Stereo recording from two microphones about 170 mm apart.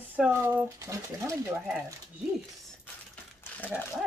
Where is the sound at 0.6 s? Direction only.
15° right (ahead or behind).